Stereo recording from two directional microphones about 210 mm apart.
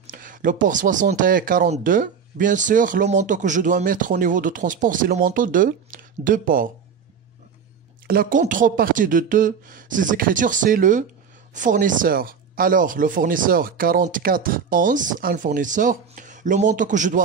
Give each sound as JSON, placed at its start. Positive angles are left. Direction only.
{"t": 0.0, "sound": "speech", "side_deg": -40}
{"t": 8.1, "sound": "speech", "side_deg": -40}